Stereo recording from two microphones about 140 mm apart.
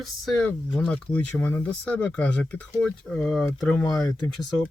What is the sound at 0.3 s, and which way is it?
Speech, 5° left (ahead or behind).